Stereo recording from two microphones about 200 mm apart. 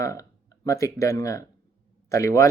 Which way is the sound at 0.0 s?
15° left (ahead or behind).